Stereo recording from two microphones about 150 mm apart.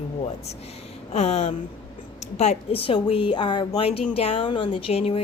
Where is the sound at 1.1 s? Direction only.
45° left (ahead or behind).